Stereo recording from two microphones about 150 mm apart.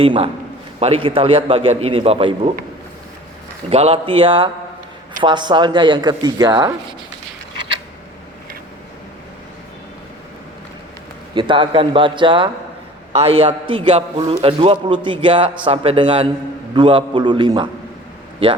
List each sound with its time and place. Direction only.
0.0 s a man's voice: 40° right (ahead or behind)
3.7 s a man's voice: 45° right (ahead or behind); by 6.7 s 25° right (ahead or behind)
11.3 s a man's voice: 30° right (ahead or behind)